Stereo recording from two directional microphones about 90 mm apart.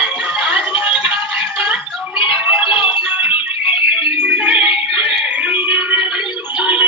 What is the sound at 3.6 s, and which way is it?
Music, 80° left.